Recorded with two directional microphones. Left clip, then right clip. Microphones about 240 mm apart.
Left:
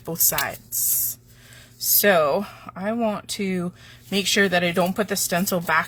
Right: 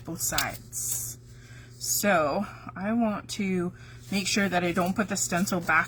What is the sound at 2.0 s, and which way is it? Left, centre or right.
Speech, left.